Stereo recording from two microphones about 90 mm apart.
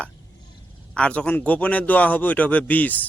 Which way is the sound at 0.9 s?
15° left (ahead or behind).